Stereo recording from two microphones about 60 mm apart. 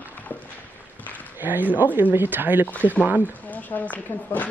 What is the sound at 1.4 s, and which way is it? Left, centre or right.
Speech, right.